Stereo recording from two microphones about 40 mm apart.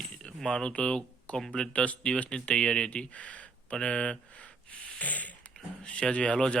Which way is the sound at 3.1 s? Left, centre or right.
Left.